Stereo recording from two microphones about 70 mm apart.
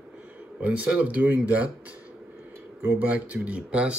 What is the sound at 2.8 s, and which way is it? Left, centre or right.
Speech, right.